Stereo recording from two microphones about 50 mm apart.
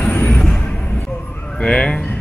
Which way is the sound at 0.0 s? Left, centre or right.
Left.